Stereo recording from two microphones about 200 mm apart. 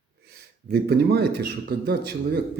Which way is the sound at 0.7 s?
55° right (ahead or behind).